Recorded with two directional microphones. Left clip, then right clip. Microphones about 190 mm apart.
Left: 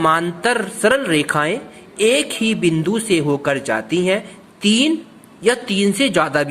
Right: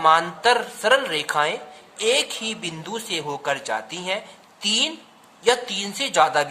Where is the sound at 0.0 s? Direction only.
15° left (ahead or behind).